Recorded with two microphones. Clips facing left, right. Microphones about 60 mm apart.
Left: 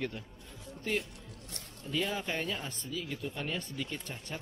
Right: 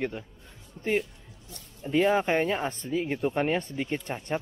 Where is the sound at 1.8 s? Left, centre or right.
Right.